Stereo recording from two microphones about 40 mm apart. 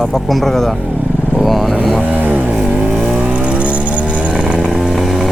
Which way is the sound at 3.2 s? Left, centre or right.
Right.